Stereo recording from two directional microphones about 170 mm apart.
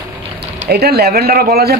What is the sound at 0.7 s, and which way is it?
Speech, 70° right (ahead or behind).